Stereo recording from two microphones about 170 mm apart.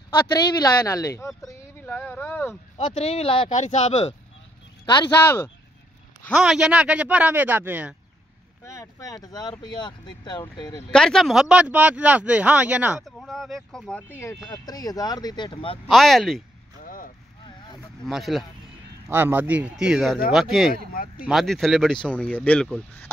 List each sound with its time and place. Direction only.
0.3 s speech: 25° left (ahead or behind)
1.8 s a sound: 10° left (ahead or behind)
2.8 s speech: 35° left (ahead or behind)
4.8 s speech: 25° left (ahead or behind)
6.3 s speech: 5° right (ahead or behind)
8.6 s speech: 20° left (ahead or behind)
10.9 s speech: 5° left (ahead or behind); by 15.8 s 30° left (ahead or behind)
15.9 s speech: centre (ahead or behind)
16.8 s vehicle: 55° left (ahead or behind)
18.0 s speech: centre (ahead or behind)
19.0 s speech: 15° right (ahead or behind)
20.7 s speech: 55° left (ahead or behind)
21.3 s speech: centre (ahead or behind)